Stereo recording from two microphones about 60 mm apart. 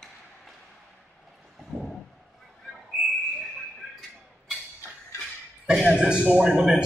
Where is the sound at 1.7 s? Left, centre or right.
Centre.